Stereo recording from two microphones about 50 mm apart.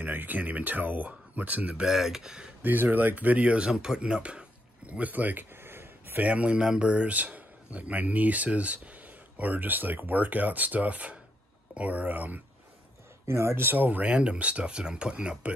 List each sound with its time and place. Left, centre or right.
0.0 s a man's voice: right
1.9 s speech: centre
2.6 s a man's voice: right
3.5 s a sound: centre; by 6.1 s right
6.1 s a man's voice: right
13.2 s speech: right
13.7 s a man's voice: right
14.1 s speech: right